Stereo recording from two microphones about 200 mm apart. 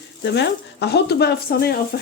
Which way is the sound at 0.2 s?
55° left (ahead or behind).